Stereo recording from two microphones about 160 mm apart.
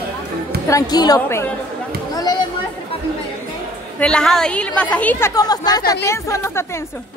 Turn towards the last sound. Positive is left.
turn(degrees=15)  # may be behind; listen again after turning